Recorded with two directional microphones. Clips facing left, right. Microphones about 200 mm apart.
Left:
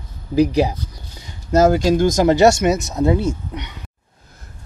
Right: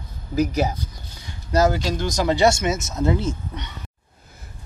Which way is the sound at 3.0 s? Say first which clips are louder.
Left 4 dB; 15° left (ahead or behind).